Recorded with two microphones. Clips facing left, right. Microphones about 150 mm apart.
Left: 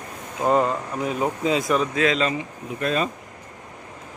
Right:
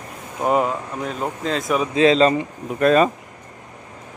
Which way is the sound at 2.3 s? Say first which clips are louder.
Right 5 dB; 55° right (ahead or behind).